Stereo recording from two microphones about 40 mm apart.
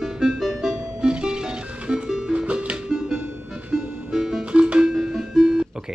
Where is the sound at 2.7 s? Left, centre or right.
Centre.